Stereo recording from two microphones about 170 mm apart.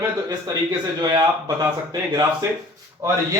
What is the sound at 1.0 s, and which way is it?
Speech, 25° right (ahead or behind).